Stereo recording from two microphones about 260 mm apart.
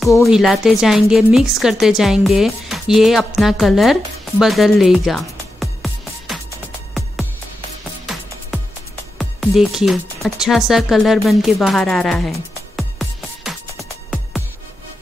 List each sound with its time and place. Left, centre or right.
0.0 s speech: centre
9.2 s speech: centre
10.7 s music: centre